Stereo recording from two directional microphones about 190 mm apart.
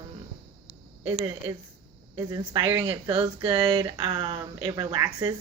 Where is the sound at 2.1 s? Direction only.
20° right (ahead or behind).